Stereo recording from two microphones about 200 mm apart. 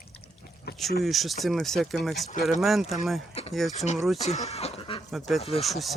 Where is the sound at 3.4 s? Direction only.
30° left (ahead or behind).